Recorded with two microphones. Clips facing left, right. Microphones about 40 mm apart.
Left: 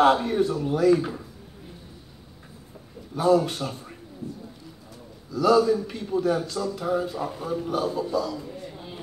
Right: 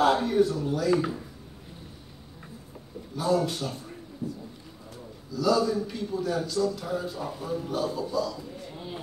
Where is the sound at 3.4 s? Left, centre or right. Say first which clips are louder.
Left 1 dB; left.